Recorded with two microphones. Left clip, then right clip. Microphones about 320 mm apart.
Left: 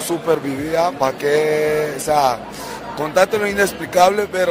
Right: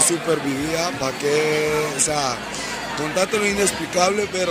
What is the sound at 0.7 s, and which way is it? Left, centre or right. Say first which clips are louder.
Speech: left 6 dB; left.